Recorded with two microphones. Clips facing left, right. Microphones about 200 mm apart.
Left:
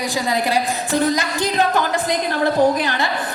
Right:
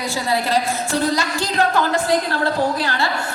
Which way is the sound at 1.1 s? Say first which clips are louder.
Left 1 dB; 15° left (ahead or behind).